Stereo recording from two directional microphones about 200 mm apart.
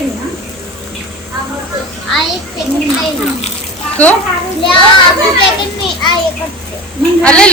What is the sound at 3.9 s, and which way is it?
Speech, 5° left (ahead or behind).